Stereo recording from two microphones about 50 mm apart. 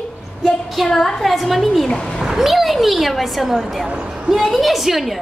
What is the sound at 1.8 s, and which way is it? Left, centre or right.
Speech, centre.